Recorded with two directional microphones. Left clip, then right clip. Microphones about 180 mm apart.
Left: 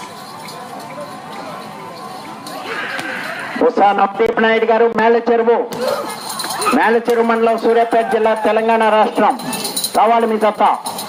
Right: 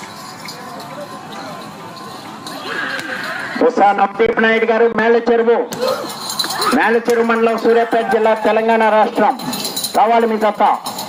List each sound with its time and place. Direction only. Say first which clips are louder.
3.6 s a man's voice: even; 25° right (ahead or behind)
6.7 s a man's voice: left 1 dB; 30° right (ahead or behind)